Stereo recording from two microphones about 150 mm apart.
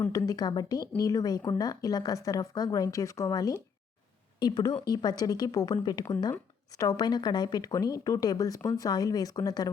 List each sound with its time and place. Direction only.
0.1 s speech: 25° left (ahead or behind)